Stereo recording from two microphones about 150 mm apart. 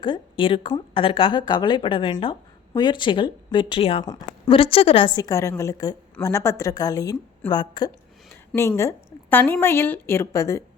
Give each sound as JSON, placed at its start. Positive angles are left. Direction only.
{"t": 0.0, "sound": "a woman's voice", "side_deg": 35}
{"t": 4.0, "sound": "a woman's voice", "side_deg": 25}
{"t": 4.5, "sound": "a woman's voice", "side_deg": 40}
{"t": 8.3, "sound": "a sound", "side_deg": 15}
{"t": 9.3, "sound": "a woman's voice", "side_deg": 15}